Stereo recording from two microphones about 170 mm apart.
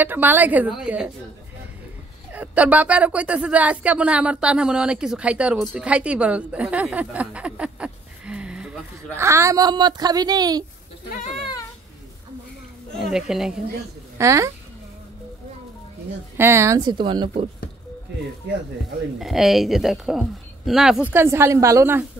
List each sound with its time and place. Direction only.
0.0 s speech: 10° right (ahead or behind)
2.3 s speech: 10° right (ahead or behind)
9.2 s speech: 15° right (ahead or behind)
12.9 s a woman's voice: centre (ahead or behind)
14.1 s a woman's voice: 15° right (ahead or behind)
16.3 s speech: 15° right (ahead or behind)
19.1 s a woman's voice: centre (ahead or behind)